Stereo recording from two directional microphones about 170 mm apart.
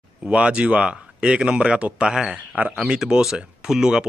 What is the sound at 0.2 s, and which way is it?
Speech, 5° right (ahead or behind).